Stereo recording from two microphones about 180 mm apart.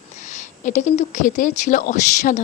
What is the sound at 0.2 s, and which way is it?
Speech, 40° left (ahead or behind).